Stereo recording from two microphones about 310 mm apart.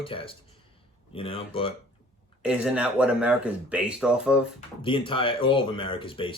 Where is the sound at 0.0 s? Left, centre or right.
Centre.